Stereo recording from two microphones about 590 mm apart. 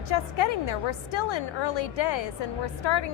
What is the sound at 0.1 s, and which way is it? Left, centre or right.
A woman's voice, left.